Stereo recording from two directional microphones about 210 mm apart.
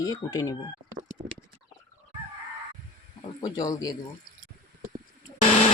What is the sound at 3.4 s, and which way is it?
Speech, 15° left (ahead or behind).